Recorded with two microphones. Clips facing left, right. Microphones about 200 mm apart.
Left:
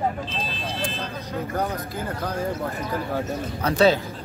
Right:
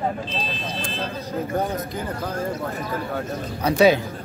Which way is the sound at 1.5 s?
20° right (ahead or behind).